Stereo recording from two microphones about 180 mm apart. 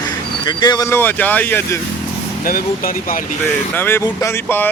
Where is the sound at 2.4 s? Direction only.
50° left (ahead or behind).